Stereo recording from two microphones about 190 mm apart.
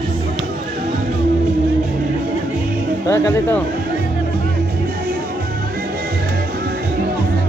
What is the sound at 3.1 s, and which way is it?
Speech, 15° left (ahead or behind).